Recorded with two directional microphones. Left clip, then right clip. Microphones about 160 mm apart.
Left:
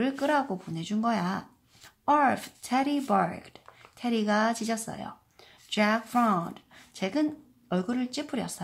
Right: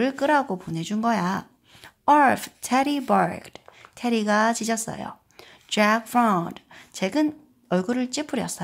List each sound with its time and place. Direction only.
0.0 s speech: 30° right (ahead or behind)